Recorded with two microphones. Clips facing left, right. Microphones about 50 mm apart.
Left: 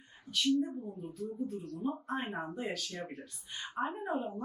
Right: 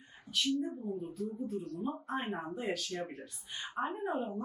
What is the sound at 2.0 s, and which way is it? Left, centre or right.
Speech, centre.